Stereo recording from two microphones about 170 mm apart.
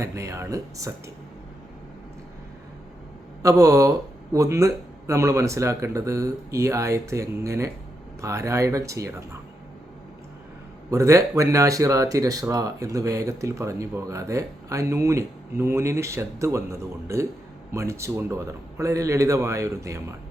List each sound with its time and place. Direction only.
0.0 s speech: 20° right (ahead or behind)
3.4 s speech: 20° right (ahead or behind)
10.9 s speech: 20° right (ahead or behind)